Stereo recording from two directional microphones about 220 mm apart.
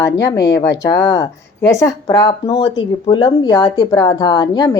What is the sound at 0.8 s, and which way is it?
Speech, 15° left (ahead or behind).